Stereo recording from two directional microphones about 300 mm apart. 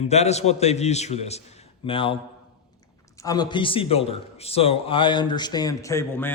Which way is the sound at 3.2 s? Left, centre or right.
Centre.